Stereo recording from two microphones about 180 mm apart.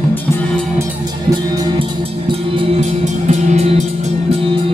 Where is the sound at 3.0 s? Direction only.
40° right (ahead or behind).